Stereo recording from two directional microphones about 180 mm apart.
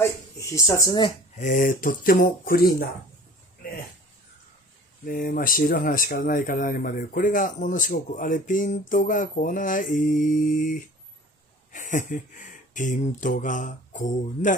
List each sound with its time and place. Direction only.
0.0 s speech: 15° left (ahead or behind)
1.4 s speech: 45° left (ahead or behind)
5.0 s speech: 55° left (ahead or behind)